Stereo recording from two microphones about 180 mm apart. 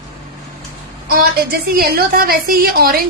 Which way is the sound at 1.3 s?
60° right (ahead or behind).